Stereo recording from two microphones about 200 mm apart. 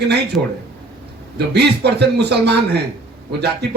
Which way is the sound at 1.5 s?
55° right (ahead or behind).